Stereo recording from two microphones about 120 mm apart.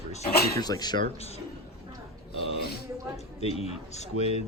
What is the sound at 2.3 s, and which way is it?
Speech, 55° left (ahead or behind).